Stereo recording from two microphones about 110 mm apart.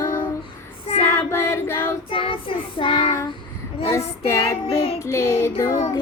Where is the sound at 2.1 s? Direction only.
55° left (ahead or behind).